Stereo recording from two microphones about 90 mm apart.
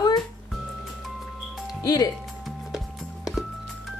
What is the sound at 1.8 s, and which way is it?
Speech, 40° left (ahead or behind).